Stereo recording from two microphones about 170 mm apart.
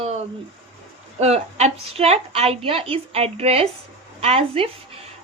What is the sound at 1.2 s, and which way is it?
A woman's voice, 40° right (ahead or behind).